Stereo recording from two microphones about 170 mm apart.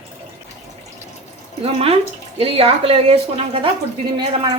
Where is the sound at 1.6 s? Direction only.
35° right (ahead or behind).